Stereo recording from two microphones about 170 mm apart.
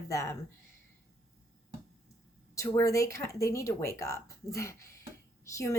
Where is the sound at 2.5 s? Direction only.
20° left (ahead or behind).